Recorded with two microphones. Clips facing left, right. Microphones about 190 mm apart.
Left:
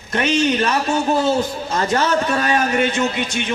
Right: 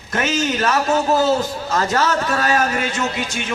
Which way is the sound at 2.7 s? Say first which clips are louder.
Left 5 dB; 25° left (ahead or behind).